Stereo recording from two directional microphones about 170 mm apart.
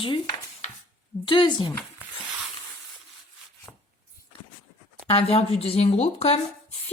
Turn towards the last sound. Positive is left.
turn(degrees=40)  # may be behind; listen again after turning